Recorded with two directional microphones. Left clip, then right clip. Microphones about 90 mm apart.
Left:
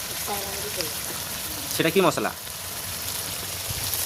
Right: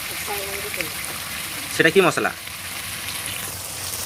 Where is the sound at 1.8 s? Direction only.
20° right (ahead or behind).